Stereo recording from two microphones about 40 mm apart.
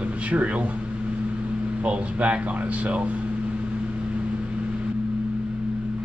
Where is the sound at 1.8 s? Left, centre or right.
Right.